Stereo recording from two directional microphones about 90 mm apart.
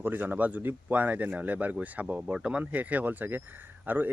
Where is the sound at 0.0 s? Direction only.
20° right (ahead or behind).